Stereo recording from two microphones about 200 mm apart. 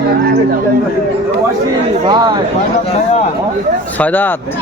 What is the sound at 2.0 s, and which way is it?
Speech, 20° right (ahead or behind).